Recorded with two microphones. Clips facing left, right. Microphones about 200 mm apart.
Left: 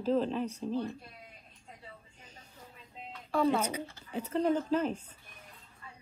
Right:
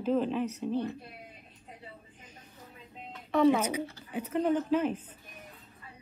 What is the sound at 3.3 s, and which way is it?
A woman's voice, 10° right (ahead or behind).